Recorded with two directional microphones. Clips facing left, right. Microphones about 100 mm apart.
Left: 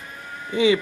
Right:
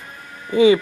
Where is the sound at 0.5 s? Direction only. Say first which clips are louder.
Right 5 dB; 40° right (ahead or behind).